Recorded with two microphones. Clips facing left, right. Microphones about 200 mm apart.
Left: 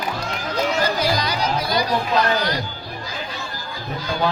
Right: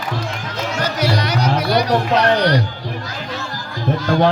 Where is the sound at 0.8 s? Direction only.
75° right (ahead or behind).